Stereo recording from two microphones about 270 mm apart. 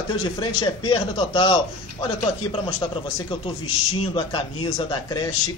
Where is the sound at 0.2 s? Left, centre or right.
Centre.